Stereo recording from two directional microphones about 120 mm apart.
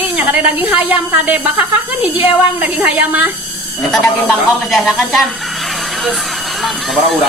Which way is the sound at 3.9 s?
Centre (ahead or behind).